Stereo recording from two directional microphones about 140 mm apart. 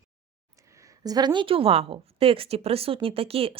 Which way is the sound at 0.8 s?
25° right (ahead or behind).